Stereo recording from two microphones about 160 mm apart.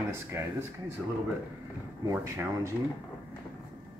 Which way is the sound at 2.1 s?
20° right (ahead or behind).